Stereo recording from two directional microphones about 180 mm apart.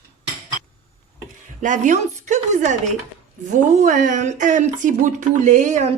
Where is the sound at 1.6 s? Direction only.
45° right (ahead or behind).